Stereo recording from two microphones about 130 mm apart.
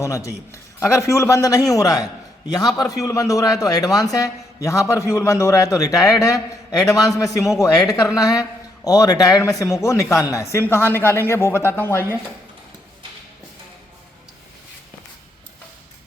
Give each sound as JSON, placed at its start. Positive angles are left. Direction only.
{"t": 0.0, "sound": "a man's voice", "side_deg": 25}